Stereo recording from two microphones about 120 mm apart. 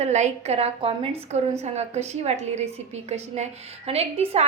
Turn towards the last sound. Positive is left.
turn(degrees=-60)  # may be behind; listen again after turning